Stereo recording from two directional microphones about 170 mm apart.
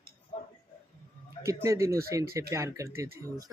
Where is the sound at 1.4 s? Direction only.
15° right (ahead or behind).